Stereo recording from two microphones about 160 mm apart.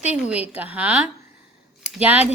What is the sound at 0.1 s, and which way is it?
A woman's voice, 10° right (ahead or behind).